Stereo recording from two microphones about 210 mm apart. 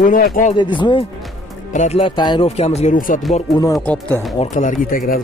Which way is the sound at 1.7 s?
35° left (ahead or behind).